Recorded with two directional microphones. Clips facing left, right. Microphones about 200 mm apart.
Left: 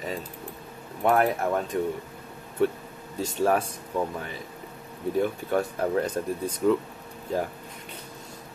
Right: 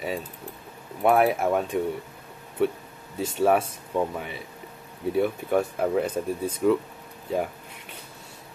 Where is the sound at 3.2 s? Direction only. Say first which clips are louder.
Right 2 dB; 10° right (ahead or behind).